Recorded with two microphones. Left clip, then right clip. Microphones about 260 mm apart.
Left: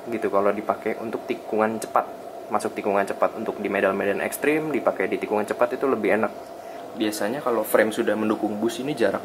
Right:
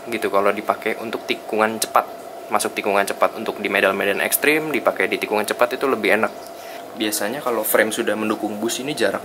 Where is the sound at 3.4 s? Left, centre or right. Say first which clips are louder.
Right 4 dB; centre.